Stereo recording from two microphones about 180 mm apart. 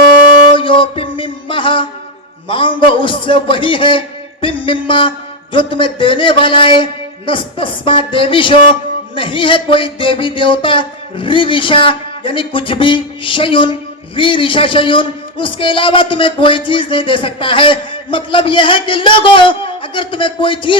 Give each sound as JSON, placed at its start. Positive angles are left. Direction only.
{"t": 0.5, "sound": "music", "side_deg": 30}
{"t": 2.5, "sound": "a man's voice", "side_deg": 30}